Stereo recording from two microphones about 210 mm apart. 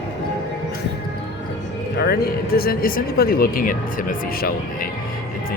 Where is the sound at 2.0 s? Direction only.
45° left (ahead or behind).